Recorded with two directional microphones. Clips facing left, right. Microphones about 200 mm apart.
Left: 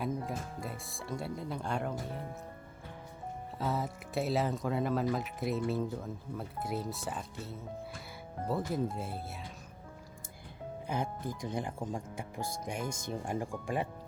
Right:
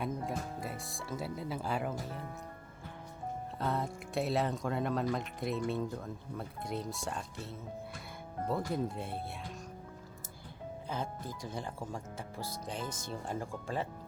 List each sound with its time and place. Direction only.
0.0 s speech: centre (ahead or behind)
3.6 s speech: 5° left (ahead or behind)
10.8 s speech: 15° left (ahead or behind)